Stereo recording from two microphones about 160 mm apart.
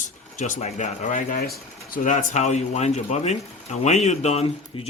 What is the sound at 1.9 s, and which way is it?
Speech, 55° left (ahead or behind).